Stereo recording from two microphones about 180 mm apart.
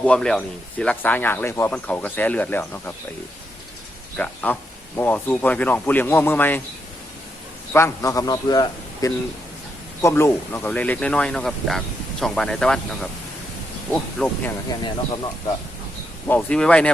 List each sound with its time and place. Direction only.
0.0 s speech: 5° left (ahead or behind)
4.2 s speech: 5° left (ahead or behind)
7.7 s speech: 15° left (ahead or behind)
14.8 s speech: 25° left (ahead or behind)
16.2 s speech: 10° left (ahead or behind)